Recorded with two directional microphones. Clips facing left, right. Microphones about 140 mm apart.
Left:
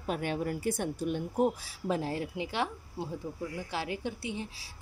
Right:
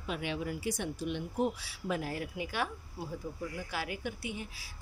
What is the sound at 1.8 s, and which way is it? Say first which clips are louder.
Speech: left 3 dB; 30° left (ahead or behind).